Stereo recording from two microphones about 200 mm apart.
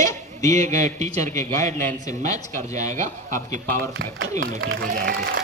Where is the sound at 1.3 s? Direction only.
15° left (ahead or behind).